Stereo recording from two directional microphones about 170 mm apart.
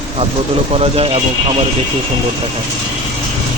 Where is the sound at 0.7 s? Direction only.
35° right (ahead or behind).